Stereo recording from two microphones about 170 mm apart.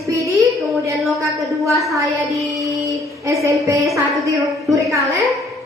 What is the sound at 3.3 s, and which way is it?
Speech, 15° right (ahead or behind).